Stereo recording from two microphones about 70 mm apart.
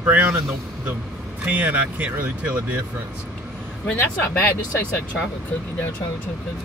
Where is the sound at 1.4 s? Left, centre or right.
Right.